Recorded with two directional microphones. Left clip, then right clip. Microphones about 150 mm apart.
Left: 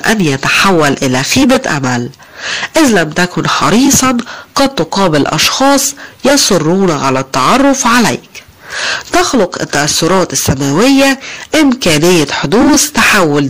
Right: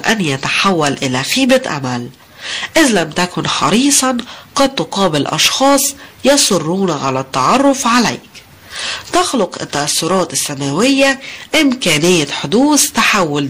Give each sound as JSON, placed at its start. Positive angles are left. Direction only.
{"t": 0.0, "sound": "speech", "side_deg": 35}